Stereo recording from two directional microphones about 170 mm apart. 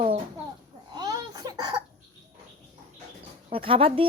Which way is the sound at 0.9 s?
25° right (ahead or behind).